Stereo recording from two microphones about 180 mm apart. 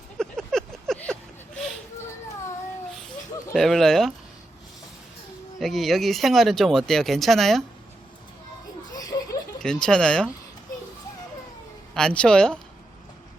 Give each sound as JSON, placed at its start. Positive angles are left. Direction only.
{"t": 0.2, "sound": "a sound", "side_deg": 5}
{"t": 3.5, "sound": "speech", "side_deg": 0}
{"t": 5.5, "sound": "speech", "side_deg": 0}
{"t": 8.9, "sound": "laughter", "side_deg": 20}
{"t": 9.6, "sound": "speech", "side_deg": 5}
{"t": 11.9, "sound": "speech", "side_deg": 5}